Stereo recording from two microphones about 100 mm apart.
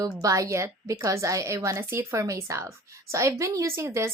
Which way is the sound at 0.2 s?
35° right (ahead or behind).